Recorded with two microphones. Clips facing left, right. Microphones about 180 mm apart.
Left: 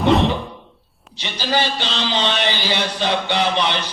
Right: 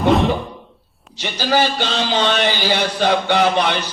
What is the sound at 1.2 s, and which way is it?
A man's voice, 45° right (ahead or behind).